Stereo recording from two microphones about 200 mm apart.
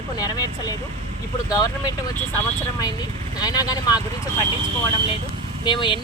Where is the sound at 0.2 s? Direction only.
20° left (ahead or behind).